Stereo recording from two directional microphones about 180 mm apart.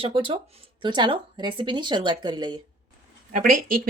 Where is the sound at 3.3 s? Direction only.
50° right (ahead or behind).